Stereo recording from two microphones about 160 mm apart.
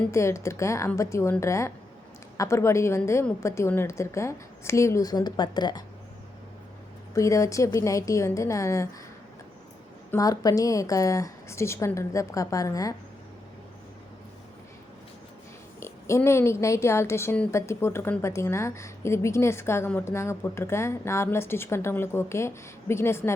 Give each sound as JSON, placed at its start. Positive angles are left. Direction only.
{"t": 0.1, "sound": "speech", "side_deg": 15}
{"t": 7.1, "sound": "a woman's voice", "side_deg": 20}
{"t": 10.1, "sound": "a woman's voice", "side_deg": 20}
{"t": 15.8, "sound": "speech", "side_deg": 20}